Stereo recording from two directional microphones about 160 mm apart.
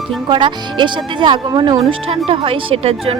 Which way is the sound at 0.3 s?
30° right (ahead or behind).